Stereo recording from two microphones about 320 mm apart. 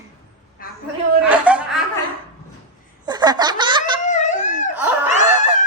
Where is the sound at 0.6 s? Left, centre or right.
Left.